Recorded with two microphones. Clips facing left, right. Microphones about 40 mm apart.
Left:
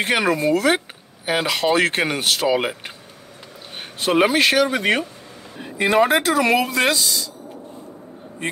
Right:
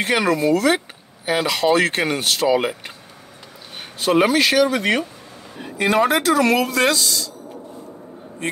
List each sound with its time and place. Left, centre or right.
0.0 s speech: centre
4.0 s speech: centre